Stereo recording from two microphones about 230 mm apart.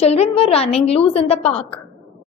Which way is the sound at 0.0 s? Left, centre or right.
Left.